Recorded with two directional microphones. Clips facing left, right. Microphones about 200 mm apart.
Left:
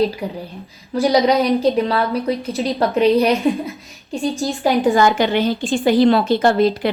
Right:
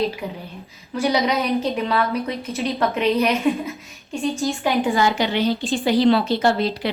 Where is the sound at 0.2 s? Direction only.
35° left (ahead or behind).